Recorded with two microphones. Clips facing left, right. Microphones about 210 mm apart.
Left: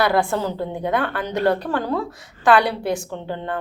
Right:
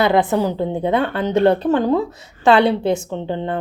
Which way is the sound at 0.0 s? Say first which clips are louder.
Right 4 dB; 20° right (ahead or behind).